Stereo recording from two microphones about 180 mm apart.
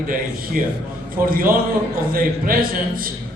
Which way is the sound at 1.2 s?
55° right (ahead or behind).